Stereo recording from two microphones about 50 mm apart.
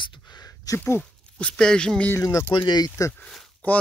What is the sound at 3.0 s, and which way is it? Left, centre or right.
Speech, left.